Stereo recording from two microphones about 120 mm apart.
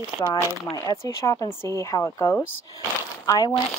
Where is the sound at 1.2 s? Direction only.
25° left (ahead or behind).